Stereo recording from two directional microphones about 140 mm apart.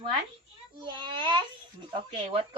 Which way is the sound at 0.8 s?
35° right (ahead or behind).